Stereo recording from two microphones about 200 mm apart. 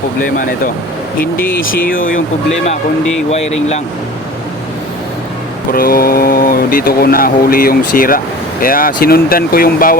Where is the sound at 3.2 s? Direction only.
35° left (ahead or behind).